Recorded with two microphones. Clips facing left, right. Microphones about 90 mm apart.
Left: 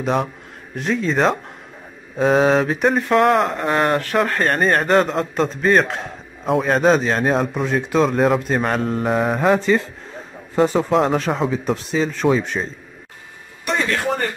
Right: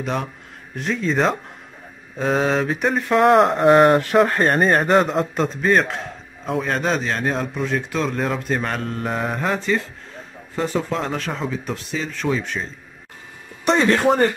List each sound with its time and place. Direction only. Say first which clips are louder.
0.0 s a man's voice: left 5 dB; 10° left (ahead or behind); by 12.6 s 25° left (ahead or behind)
13.7 s speech: right 4 dB; 25° right (ahead or behind)